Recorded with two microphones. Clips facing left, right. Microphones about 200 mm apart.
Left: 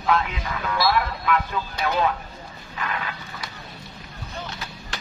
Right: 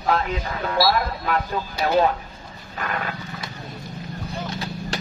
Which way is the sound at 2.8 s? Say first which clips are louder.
Right 2 dB; 45° right (ahead or behind).